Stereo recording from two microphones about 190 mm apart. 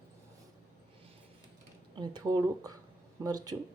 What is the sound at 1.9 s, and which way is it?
Speech, 20° right (ahead or behind).